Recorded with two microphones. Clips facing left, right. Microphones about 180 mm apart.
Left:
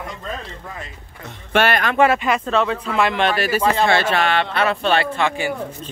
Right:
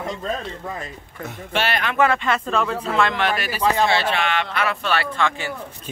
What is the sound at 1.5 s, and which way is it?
Speech, 50° left (ahead or behind).